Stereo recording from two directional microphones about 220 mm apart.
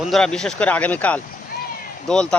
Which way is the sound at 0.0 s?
Centre (ahead or behind).